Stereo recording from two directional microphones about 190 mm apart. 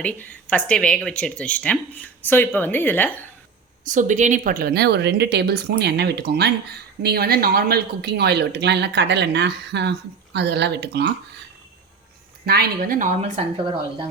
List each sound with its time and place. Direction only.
0.0 s speech: 5° left (ahead or behind)
3.8 s speech: 40° right (ahead or behind); by 11.1 s 60° right (ahead or behind)
12.5 s speech: 50° right (ahead or behind)